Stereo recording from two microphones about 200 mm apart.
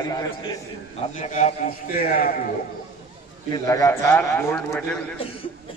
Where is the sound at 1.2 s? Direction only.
35° left (ahead or behind).